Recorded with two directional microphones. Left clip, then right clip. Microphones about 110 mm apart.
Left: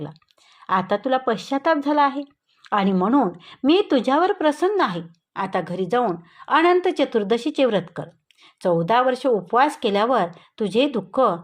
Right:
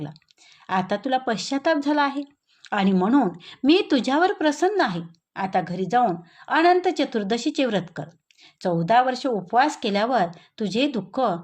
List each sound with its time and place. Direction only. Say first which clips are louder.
0.7 s speech: left 3 dB; 30° left (ahead or behind)
8.6 s speech: left 1 dB; 45° left (ahead or behind)